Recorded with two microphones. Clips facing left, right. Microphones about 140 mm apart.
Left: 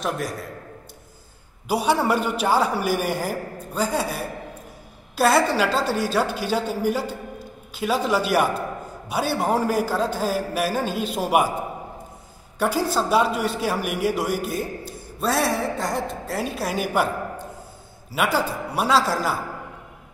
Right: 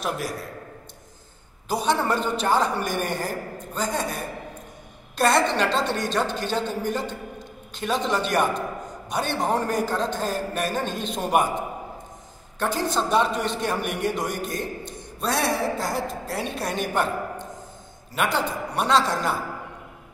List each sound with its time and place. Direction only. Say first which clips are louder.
0.0 s a man's voice: left 2 dB; centre (ahead or behind)
1.7 s a man's voice: left 3 dB; 10° left (ahead or behind)